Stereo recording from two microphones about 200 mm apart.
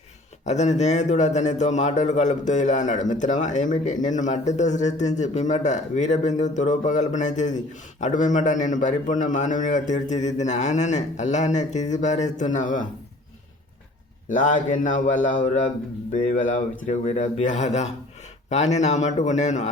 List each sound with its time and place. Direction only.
0.4 s a man's voice: 35° left (ahead or behind)
14.3 s a man's voice: 40° left (ahead or behind)